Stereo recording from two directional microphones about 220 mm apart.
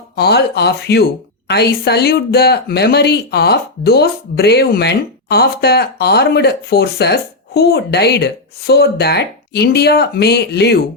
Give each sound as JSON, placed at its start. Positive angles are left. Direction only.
{"t": 0.2, "sound": "speech", "side_deg": 45}